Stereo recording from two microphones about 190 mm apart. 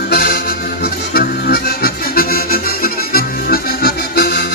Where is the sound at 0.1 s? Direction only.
55° left (ahead or behind).